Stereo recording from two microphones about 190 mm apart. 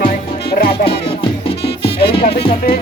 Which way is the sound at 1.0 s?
30° left (ahead or behind).